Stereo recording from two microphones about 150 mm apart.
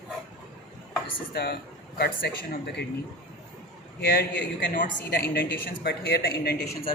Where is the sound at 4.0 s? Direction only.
85° left.